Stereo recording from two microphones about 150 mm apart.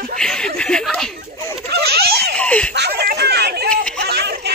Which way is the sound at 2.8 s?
90° right.